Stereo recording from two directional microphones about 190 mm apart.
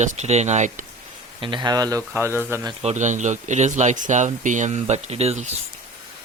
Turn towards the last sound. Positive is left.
turn(degrees=-35)  # may be behind; listen again after turning